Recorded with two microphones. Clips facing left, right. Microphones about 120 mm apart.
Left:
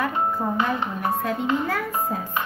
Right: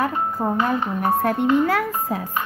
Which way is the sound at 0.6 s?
40° right (ahead or behind).